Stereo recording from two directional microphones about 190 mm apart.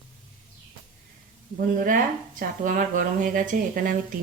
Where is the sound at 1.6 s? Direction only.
45° right (ahead or behind).